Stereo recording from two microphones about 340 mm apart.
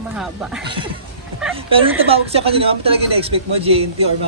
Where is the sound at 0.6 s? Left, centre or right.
Centre.